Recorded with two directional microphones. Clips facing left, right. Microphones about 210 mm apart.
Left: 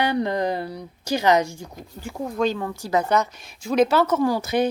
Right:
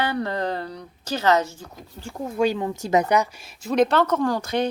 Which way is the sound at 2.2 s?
10° right (ahead or behind).